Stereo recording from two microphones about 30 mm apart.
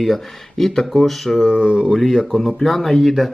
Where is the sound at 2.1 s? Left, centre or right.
Centre.